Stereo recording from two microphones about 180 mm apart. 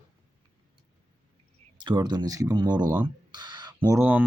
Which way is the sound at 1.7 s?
25° right (ahead or behind).